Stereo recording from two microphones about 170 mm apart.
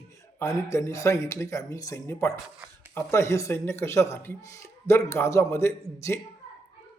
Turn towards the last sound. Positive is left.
turn(degrees=15)  # may be behind; listen again after turning